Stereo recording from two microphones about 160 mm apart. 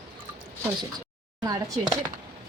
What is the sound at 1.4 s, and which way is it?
Speech, 20° right (ahead or behind).